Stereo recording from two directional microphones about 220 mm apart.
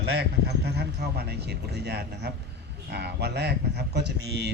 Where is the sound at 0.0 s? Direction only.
50° right (ahead or behind).